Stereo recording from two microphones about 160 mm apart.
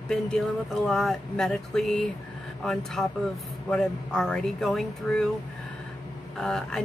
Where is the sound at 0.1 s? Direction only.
5° left (ahead or behind).